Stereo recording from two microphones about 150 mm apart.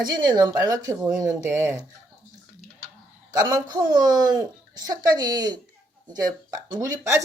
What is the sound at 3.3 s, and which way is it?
Speech, 25° right (ahead or behind).